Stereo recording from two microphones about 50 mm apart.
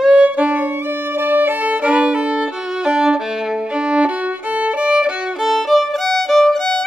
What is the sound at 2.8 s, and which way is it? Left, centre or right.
Violin, centre.